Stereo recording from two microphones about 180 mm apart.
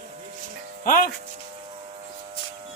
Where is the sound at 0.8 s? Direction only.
50° left (ahead or behind).